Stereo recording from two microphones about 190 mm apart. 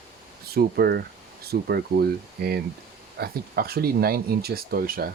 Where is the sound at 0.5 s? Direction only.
55° right (ahead or behind).